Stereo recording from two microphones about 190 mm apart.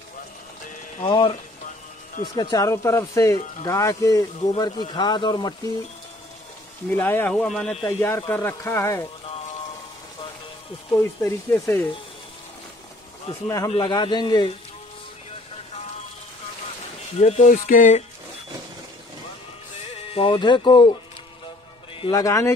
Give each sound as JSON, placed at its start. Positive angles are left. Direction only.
{"t": 1.0, "sound": "speech", "side_deg": 25}
{"t": 2.3, "sound": "speech", "side_deg": 20}
{"t": 6.9, "sound": "speech", "side_deg": 10}
{"t": 10.9, "sound": "speech", "side_deg": 15}
{"t": 13.3, "sound": "speech", "side_deg": 20}
{"t": 17.2, "sound": "music", "side_deg": 40}
{"t": 20.1, "sound": "speech", "side_deg": 30}
{"t": 22.0, "sound": "speech", "side_deg": 15}